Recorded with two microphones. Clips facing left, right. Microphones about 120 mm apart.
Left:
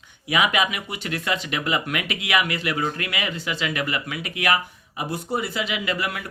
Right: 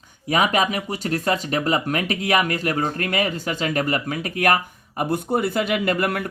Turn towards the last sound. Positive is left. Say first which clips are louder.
# right 5 dB
turn(degrees=-50)  # may be behind; listen again after turning